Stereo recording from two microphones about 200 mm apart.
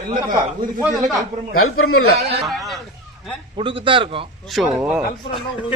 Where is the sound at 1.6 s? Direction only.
90° left.